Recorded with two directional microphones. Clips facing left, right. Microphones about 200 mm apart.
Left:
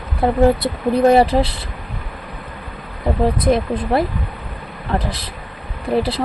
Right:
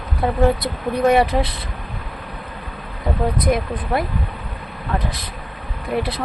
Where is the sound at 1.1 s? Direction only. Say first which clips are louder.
Left 3 dB; 30° left (ahead or behind).